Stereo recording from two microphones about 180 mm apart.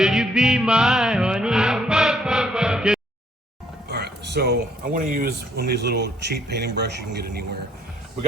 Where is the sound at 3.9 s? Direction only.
65° right (ahead or behind).